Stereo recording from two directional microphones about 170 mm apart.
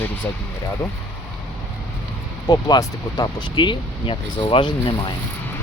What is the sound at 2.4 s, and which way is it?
Speech, 20° left (ahead or behind).